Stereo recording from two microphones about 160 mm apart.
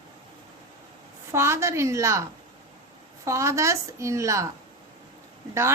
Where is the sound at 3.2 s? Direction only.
20° right (ahead or behind).